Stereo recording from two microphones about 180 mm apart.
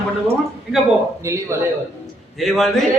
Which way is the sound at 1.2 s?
15° right (ahead or behind).